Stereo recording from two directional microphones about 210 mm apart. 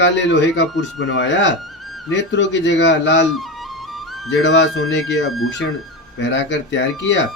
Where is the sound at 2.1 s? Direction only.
60° left (ahead or behind).